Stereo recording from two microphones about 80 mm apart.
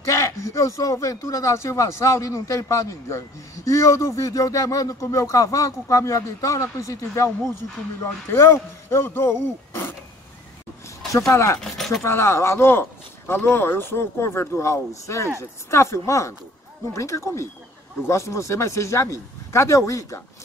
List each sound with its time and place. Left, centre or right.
0.0 s speech: left
11.1 s speech: left
11.6 s speech: centre
12.0 s speech: left